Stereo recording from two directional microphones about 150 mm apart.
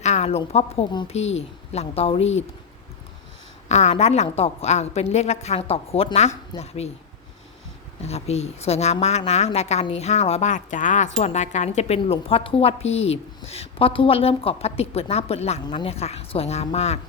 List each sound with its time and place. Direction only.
0.0 s a woman's voice: 50° left (ahead or behind)
3.7 s a woman's voice: 50° left (ahead or behind)
8.0 s a woman's voice: 45° left (ahead or behind)
15.6 s a woman's voice: 35° left (ahead or behind)